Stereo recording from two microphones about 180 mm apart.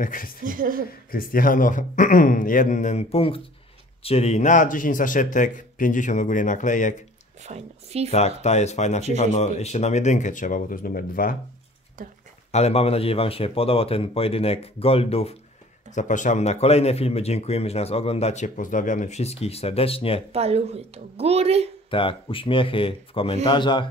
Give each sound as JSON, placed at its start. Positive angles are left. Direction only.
{"t": 0.0, "sound": "speech", "side_deg": 50}
{"t": 0.5, "sound": "speech", "side_deg": -50}
{"t": 1.1, "sound": "speech", "side_deg": 50}
{"t": 7.4, "sound": "a woman's voice", "side_deg": -35}
{"t": 8.1, "sound": "speech", "side_deg": 35}
{"t": 12.4, "sound": "speech", "side_deg": 35}
{"t": 15.9, "sound": "speech", "side_deg": 45}
{"t": 20.3, "sound": "a woman's voice", "side_deg": -35}
{"t": 21.9, "sound": "speech", "side_deg": 30}